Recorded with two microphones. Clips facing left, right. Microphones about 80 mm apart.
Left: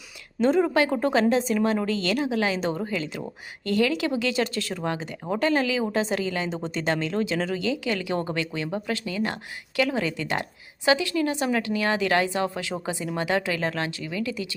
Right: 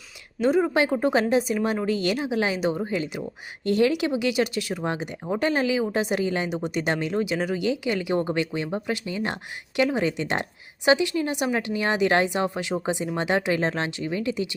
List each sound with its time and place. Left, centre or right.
0.4 s a woman's voice: centre